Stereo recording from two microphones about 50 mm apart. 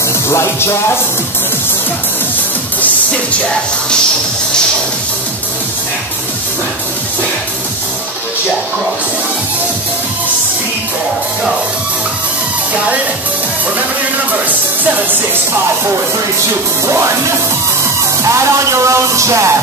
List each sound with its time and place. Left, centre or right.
0.3 s music: left
16.8 s music: right
18.2 s music: right